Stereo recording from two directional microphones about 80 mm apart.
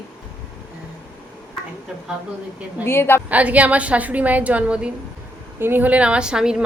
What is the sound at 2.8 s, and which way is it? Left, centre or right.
Speech, left.